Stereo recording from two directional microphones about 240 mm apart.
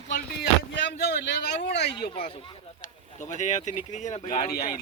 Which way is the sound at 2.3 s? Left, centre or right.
Left.